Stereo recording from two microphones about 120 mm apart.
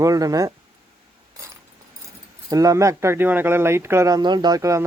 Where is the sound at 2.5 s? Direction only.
30° right (ahead or behind).